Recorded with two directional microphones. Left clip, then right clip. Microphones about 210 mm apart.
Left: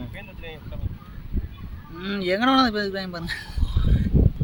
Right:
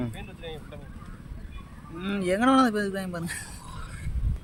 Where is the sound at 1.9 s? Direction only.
5° right (ahead or behind).